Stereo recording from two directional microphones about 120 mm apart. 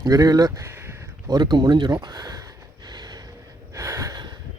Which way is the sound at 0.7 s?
20° right (ahead or behind).